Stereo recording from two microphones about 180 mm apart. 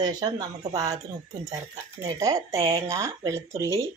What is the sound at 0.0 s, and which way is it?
Speech, 20° right (ahead or behind).